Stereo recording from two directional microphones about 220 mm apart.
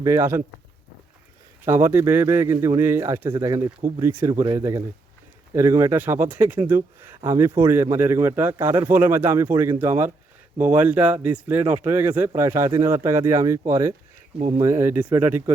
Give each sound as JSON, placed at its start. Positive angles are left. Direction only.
{"t": 0.0, "sound": "a man's voice", "side_deg": -10}
{"t": 1.6, "sound": "a man's voice", "side_deg": -10}
{"t": 14.3, "sound": "speech", "side_deg": -35}
{"t": 14.6, "sound": "a man's voice", "side_deg": -10}